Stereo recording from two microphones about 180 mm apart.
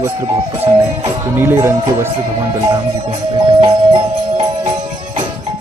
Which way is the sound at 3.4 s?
25° right (ahead or behind).